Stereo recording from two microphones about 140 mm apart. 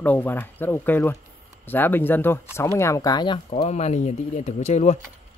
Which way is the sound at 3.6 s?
50° left (ahead or behind).